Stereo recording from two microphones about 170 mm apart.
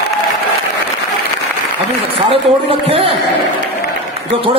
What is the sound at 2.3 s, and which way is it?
Speech, 35° right (ahead or behind).